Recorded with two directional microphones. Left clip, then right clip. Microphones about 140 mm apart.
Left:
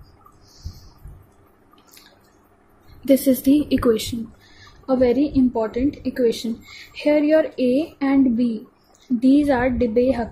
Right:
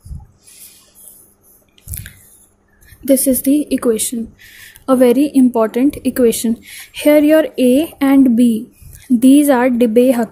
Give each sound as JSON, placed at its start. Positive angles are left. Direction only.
{"t": 0.5, "sound": "a sound", "side_deg": -55}
{"t": 3.1, "sound": "a woman's voice", "side_deg": -35}
{"t": 4.8, "sound": "a woman's voice", "side_deg": -50}